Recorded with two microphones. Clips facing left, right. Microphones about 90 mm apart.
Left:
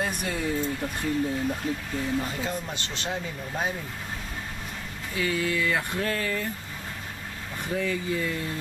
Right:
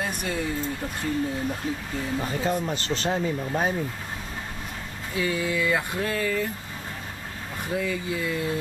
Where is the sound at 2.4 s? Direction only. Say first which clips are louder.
Right 6 dB; 40° right (ahead or behind).